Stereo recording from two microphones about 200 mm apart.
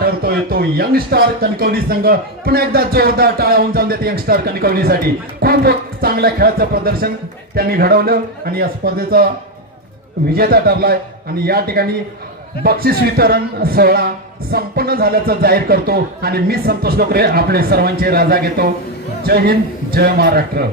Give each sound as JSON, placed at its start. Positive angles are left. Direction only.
{"t": 0.0, "sound": "a man's voice", "side_deg": -50}
{"t": 10.3, "sound": "a man's voice", "side_deg": -50}